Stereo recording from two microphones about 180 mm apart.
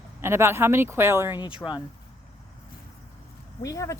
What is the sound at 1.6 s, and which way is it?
Speech, 10° left (ahead or behind).